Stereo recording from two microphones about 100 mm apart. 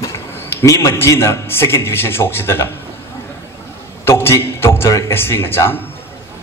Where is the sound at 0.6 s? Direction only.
30° left (ahead or behind).